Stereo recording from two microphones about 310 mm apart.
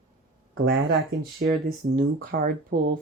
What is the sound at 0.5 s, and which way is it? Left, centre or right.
Speech, right.